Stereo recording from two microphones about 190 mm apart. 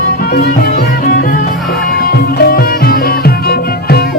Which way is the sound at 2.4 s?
50° left (ahead or behind).